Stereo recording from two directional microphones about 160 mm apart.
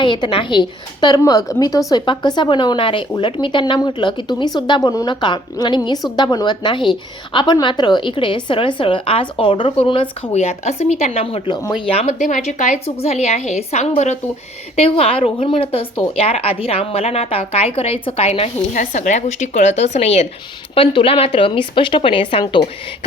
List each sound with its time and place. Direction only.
0.0 s a woman's voice: 30° left (ahead or behind)